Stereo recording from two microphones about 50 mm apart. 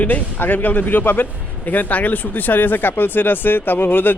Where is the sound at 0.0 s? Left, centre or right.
Left.